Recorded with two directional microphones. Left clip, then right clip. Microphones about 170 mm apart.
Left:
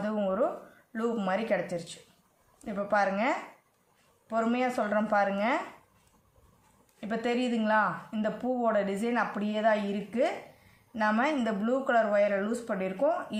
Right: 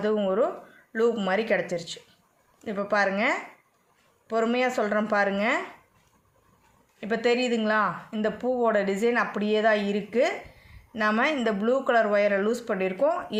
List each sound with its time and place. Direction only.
0.0 s speech: 50° right (ahead or behind)
7.0 s speech: 55° right (ahead or behind)